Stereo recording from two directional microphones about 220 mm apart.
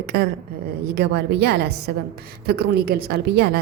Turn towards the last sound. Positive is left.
turn(degrees=-45)  # may be behind; listen again after turning